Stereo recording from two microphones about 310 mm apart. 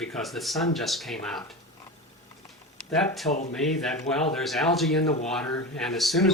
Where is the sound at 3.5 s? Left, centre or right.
Centre.